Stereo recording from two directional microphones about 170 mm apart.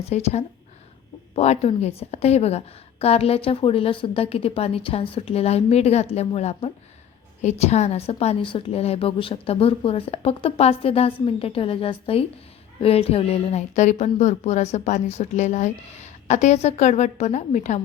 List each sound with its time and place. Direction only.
0.1 s a woman's voice: 40° left (ahead or behind)